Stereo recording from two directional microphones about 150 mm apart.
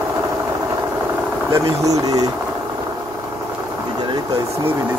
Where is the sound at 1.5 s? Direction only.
25° right (ahead or behind).